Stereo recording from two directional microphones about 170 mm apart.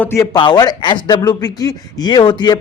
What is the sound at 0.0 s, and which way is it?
Speech, 15° left (ahead or behind).